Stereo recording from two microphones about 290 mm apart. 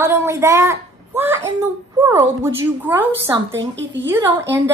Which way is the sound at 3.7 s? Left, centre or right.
Right.